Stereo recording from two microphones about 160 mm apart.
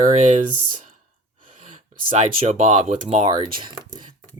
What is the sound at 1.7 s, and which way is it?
Speech, 45° right (ahead or behind).